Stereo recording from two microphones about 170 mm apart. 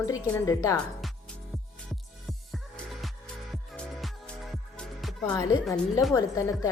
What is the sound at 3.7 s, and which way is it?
Music, 5° left (ahead or behind).